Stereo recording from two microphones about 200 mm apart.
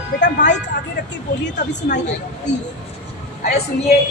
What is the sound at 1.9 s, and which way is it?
Speech, 55° left (ahead or behind).